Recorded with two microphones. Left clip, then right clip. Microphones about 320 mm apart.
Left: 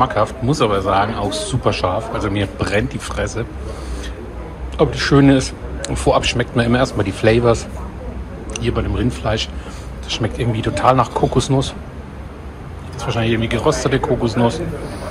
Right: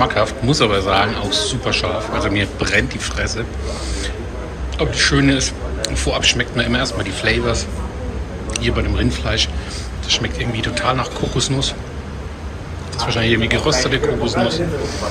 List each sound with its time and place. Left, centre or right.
0.0 s a man's voice: centre
4.7 s speech: centre
8.6 s a man's voice: centre
13.1 s speech: centre